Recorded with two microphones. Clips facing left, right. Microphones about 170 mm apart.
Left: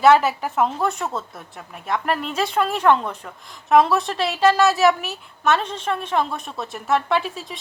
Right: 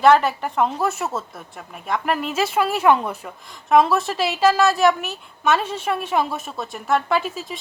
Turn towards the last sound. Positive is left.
turn(degrees=0)  # may be behind; listen again after turning